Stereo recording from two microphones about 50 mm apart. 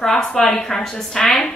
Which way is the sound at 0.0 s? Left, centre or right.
Centre.